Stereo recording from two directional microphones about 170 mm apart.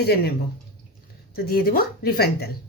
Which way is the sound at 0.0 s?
70° left (ahead or behind).